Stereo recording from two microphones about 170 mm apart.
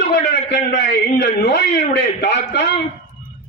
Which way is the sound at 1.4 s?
90° left.